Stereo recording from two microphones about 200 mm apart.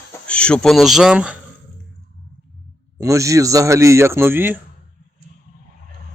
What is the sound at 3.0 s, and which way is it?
A man's voice, 15° right (ahead or behind).